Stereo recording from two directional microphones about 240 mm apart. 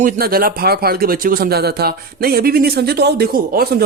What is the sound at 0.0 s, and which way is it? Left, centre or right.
Speech, right.